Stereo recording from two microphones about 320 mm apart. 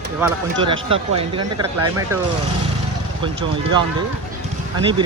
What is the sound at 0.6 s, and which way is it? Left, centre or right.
Speech, centre.